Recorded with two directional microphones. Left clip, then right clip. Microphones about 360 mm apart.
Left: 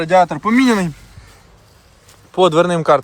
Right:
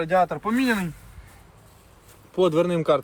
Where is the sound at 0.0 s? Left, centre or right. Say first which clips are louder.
Left 8 dB; centre.